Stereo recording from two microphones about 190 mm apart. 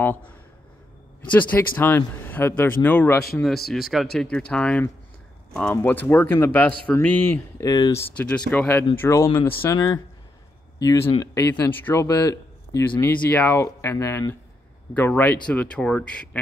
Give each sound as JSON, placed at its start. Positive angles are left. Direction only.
{"t": 1.3, "sound": "speech", "side_deg": 10}
{"t": 8.2, "sound": "speech", "side_deg": 5}